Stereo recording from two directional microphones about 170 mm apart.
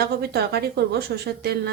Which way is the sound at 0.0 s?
70° right (ahead or behind).